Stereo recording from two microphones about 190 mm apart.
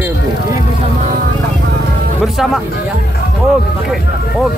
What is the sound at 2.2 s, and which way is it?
Speech, centre (ahead or behind).